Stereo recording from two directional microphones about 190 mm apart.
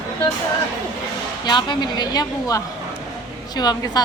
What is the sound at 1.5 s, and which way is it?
A woman's voice, 25° left (ahead or behind).